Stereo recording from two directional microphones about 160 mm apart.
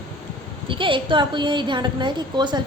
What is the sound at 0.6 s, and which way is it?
A woman's voice, 30° right (ahead or behind).